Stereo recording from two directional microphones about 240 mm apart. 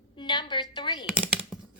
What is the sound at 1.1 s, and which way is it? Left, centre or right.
Computer keyboard, centre.